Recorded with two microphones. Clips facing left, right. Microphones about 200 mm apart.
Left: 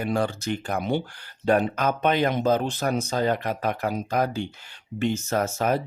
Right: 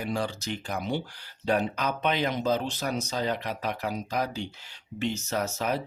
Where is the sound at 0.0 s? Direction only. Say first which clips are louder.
Left 5 dB; 55° left (ahead or behind).